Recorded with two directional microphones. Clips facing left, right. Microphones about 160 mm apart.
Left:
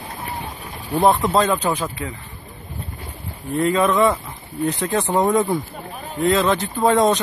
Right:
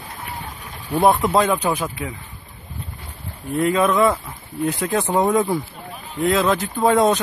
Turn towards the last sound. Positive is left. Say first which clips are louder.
# even
turn(degrees=-5)  # may be behind; listen again after turning